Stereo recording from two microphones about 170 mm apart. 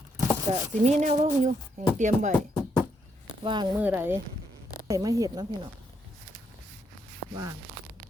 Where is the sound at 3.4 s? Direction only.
25° right (ahead or behind).